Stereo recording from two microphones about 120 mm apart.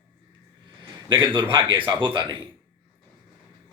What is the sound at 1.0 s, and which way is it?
A man's voice, 45° right (ahead or behind).